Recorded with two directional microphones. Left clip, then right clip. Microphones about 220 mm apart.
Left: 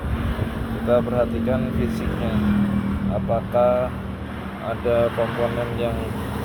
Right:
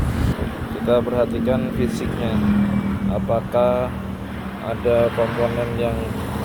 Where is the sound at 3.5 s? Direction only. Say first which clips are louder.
Even; 35° right (ahead or behind).